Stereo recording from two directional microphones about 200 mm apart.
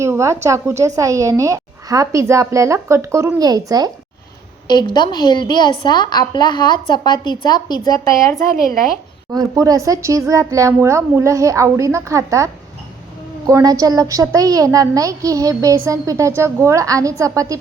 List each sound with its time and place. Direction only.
0.0 s a woman's voice: 15° right (ahead or behind)
4.7 s a woman's voice: 20° left (ahead or behind)
9.3 s a woman's voice: 20° right (ahead or behind)
13.5 s a woman's voice: 15° right (ahead or behind)